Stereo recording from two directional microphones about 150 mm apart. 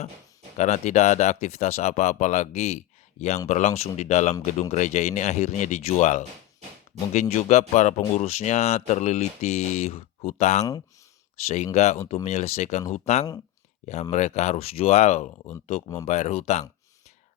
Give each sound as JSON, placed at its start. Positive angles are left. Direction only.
{"t": 0.5, "sound": "speech", "side_deg": 50}